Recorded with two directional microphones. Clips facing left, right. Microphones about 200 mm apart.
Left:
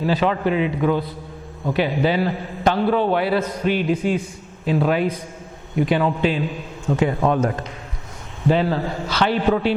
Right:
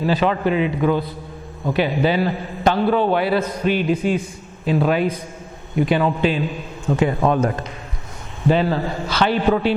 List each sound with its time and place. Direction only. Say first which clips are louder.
0.0 s a man's voice: right 1 dB; 15° right (ahead or behind)